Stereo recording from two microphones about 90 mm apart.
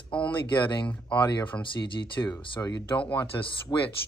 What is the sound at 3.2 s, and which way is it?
Speech, 50° left (ahead or behind).